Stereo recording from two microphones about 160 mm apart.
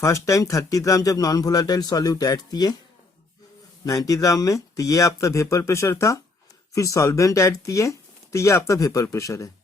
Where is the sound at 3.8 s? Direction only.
20° left (ahead or behind).